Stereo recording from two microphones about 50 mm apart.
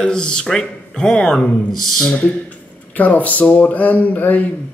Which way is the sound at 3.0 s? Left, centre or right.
Left.